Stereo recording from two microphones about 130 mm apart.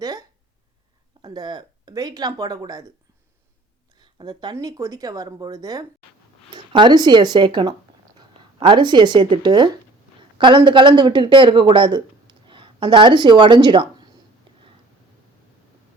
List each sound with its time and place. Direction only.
0.0 s a sound: 30° right (ahead or behind)
1.2 s speech: 35° right (ahead or behind)
4.0 s speech: 35° right (ahead or behind)